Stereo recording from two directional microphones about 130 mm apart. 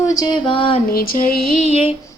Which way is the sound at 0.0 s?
30° left (ahead or behind).